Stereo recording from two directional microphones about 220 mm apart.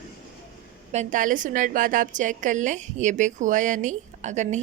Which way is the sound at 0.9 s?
35° right (ahead or behind).